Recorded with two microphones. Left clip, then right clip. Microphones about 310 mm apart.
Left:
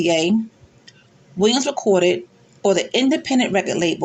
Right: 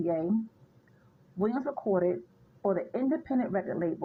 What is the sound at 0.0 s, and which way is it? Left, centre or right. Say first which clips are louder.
Speech: left 12 dB; right.